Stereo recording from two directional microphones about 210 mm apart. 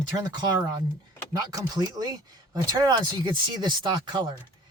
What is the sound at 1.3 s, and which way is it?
Speech, 20° right (ahead or behind).